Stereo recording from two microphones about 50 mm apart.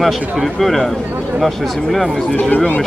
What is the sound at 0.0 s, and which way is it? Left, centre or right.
Speech, centre.